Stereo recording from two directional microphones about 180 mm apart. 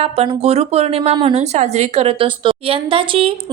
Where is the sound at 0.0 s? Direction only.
35° right (ahead or behind).